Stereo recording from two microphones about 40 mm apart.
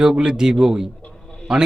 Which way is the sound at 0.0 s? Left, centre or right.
Centre.